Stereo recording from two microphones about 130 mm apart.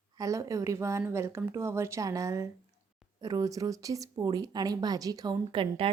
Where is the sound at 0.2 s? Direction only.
25° right (ahead or behind).